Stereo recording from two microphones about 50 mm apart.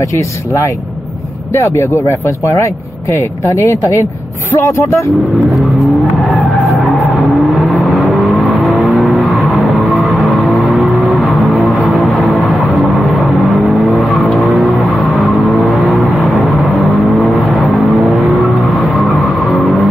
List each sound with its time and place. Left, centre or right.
1.5 s speech: left
4.6 s speech: left
5.5 s vehicle: centre
10.8 s music: centre